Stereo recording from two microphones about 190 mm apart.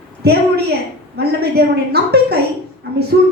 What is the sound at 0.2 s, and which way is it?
A woman's voice, 55° right (ahead or behind).